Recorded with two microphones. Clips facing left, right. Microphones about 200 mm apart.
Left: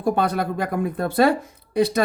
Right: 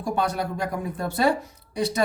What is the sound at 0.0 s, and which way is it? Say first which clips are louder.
A man's voice: left 4 dB; 55° left (ahead or behind).